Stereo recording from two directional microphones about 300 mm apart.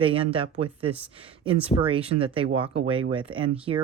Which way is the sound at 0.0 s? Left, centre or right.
Centre.